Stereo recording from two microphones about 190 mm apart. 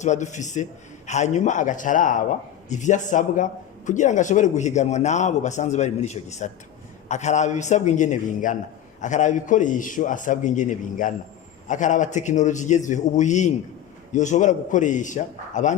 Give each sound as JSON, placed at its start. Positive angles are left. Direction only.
{"t": 0.0, "sound": "a man's voice", "side_deg": 40}